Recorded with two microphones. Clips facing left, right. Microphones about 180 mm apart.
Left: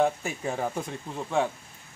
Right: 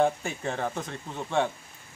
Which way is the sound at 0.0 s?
5° left (ahead or behind).